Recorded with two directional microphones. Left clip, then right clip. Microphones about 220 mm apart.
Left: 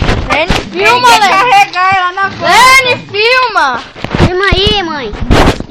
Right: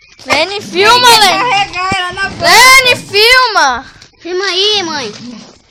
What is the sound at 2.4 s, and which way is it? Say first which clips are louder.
A child's voice: right 1 dB; 25° right (ahead or behind).